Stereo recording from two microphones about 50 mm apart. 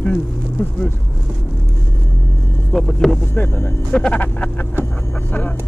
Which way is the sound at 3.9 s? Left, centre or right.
Left.